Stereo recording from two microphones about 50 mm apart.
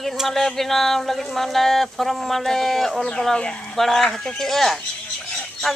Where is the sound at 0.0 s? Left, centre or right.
Centre.